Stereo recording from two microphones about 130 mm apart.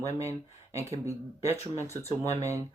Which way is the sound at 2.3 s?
25° right (ahead or behind).